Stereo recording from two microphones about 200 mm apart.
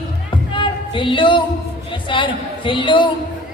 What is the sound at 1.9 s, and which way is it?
A woman's voice, 25° left (ahead or behind).